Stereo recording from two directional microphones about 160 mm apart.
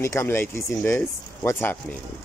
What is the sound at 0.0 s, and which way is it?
Speech, 15° left (ahead or behind).